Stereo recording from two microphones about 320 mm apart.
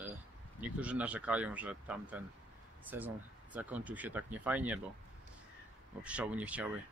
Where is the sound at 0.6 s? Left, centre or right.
Centre.